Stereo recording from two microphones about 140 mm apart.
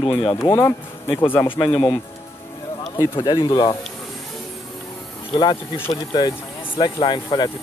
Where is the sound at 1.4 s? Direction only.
40° left (ahead or behind).